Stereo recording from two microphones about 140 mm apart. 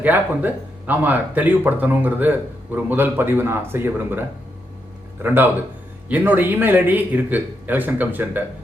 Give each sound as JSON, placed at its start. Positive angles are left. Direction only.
{"t": 0.0, "sound": "speech", "side_deg": -10}
{"t": 5.2, "sound": "speech", "side_deg": -15}